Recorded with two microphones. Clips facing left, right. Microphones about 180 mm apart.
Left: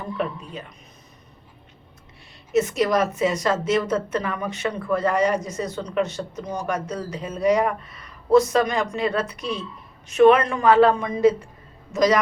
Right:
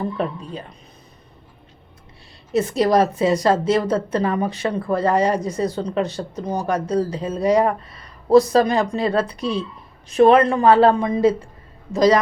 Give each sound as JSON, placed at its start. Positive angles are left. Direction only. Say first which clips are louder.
{"t": 0.0, "sound": "speech", "louder": "right 3 dB", "side_deg": -35}
{"t": 2.5, "sound": "speech", "louder": "right 3 dB", "side_deg": -35}